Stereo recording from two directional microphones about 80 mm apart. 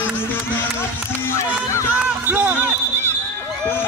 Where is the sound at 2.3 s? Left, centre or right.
Right.